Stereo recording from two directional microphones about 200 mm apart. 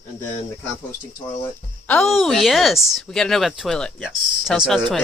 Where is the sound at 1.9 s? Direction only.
Centre (ahead or behind).